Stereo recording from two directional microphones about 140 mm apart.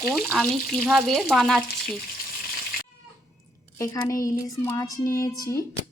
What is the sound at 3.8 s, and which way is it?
Speech, 25° left (ahead or behind).